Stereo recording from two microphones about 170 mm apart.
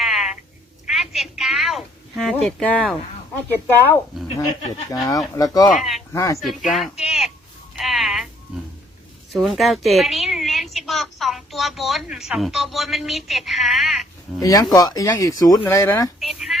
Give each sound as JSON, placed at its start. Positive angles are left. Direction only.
{"t": 0.0, "sound": "a sound", "side_deg": 0}
{"t": 0.9, "sound": "speech", "side_deg": 0}
{"t": 5.6, "sound": "speech", "side_deg": 0}
{"t": 6.1, "sound": "speech", "side_deg": 20}
{"t": 6.4, "sound": "speech", "side_deg": 0}
{"t": 7.8, "sound": "music", "side_deg": 0}
{"t": 9.3, "sound": "a woman's voice", "side_deg": 0}
{"t": 14.3, "sound": "speech", "side_deg": 20}
{"t": 16.2, "sound": "a sound", "side_deg": 0}